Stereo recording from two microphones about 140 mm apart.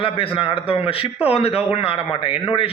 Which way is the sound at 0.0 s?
40° left (ahead or behind).